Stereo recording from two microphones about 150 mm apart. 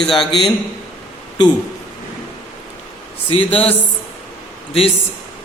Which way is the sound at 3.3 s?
40° left (ahead or behind).